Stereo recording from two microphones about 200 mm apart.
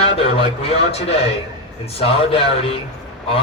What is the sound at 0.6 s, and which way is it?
A man's voice, 30° left (ahead or behind).